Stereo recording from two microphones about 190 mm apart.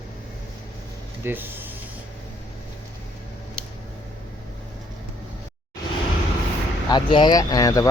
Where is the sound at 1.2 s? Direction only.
10° right (ahead or behind).